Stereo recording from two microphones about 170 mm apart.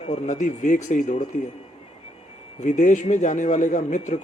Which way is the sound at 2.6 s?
45° left (ahead or behind).